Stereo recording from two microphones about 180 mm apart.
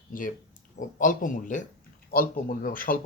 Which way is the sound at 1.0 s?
45° left (ahead or behind).